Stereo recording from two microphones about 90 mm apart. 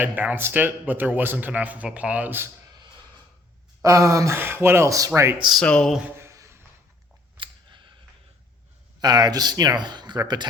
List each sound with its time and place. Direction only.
0.0 s speech: 20° right (ahead or behind)
3.8 s a sound: 35° right (ahead or behind)
4.4 s speech: 25° right (ahead or behind)
5.6 s speech: 10° left (ahead or behind)
6.1 s a sound: 35° right (ahead or behind)
7.3 s scissors: 65° right (ahead or behind)
9.0 s speech: 45° right (ahead or behind)